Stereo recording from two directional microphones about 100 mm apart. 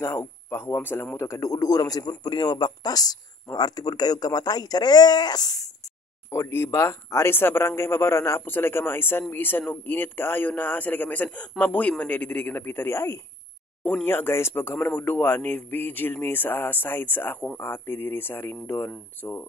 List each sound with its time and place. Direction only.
0.0 s a man's voice: 30° left (ahead or behind)
6.3 s a man's voice: 25° left (ahead or behind)